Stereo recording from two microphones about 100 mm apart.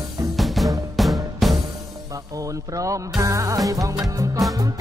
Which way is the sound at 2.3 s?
35° right (ahead or behind).